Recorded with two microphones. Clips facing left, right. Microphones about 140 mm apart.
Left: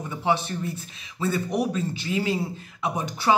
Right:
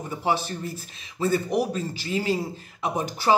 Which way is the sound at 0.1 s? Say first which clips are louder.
Left 1 dB; 35° right (ahead or behind).